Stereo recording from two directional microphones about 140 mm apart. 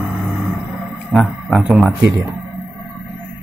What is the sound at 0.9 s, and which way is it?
Speech, centre (ahead or behind).